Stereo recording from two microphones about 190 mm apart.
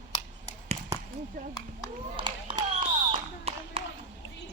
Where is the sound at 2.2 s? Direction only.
25° right (ahead or behind).